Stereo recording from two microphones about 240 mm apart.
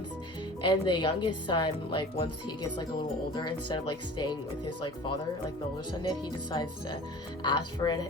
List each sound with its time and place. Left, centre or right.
0.7 s speech: centre
6.5 s speech: centre